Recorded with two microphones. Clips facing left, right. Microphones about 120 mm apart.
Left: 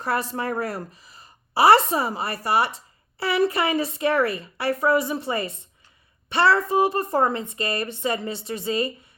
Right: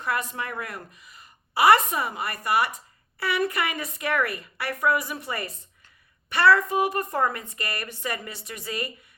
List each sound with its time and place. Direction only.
0.0 s a woman's voice: 35° left (ahead or behind)